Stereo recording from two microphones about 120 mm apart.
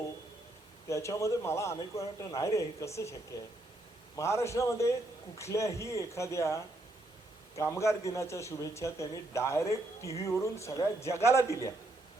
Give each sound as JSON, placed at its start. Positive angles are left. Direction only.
{"t": 0.9, "sound": "a man's voice", "side_deg": 25}
{"t": 4.2, "sound": "a man's voice", "side_deg": 25}